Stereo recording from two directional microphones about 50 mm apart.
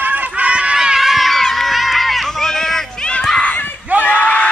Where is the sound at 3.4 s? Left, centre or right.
Left.